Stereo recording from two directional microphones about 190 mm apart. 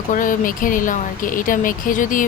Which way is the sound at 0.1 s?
45° left (ahead or behind).